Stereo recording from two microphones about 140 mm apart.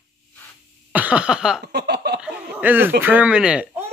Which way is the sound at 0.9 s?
10° right (ahead or behind).